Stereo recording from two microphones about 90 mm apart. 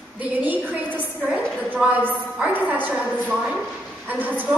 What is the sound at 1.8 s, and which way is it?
A woman's voice, 15° right (ahead or behind).